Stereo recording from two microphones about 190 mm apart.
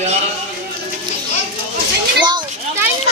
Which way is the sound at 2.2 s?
25° right (ahead or behind).